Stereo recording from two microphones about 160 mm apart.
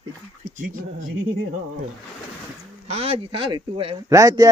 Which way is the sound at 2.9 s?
40° right (ahead or behind).